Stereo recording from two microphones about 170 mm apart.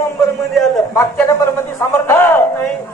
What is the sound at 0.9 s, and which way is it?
Chuckle, 15° left (ahead or behind).